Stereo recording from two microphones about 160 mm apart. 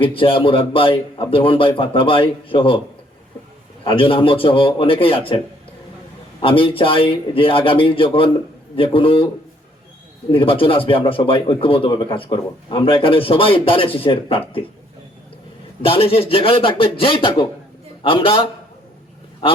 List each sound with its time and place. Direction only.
0.0 s speech: 35° left (ahead or behind)
3.8 s speech: 35° left (ahead or behind)
6.4 s speech: 35° left (ahead or behind)
10.3 s speech: 35° left (ahead or behind)
15.8 s speech: 35° left (ahead or behind)